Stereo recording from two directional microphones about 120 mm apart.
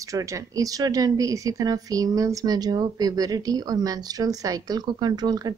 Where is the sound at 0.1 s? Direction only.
25° right (ahead or behind).